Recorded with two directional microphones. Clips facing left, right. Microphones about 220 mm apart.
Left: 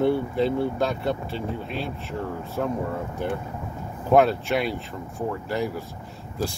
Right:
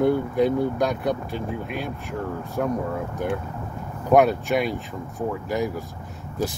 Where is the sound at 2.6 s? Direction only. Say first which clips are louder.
Right 2 dB; 5° right (ahead or behind).